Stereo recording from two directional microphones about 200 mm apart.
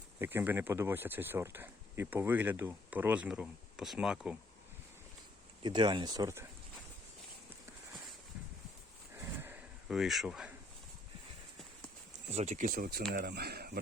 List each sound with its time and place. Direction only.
0.2 s speech: 10° right (ahead or behind)
5.6 s speech: 20° right (ahead or behind)
9.1 s a sound: 10° right (ahead or behind)
12.3 s speech: 35° right (ahead or behind); by 13.7 s 50° right (ahead or behind)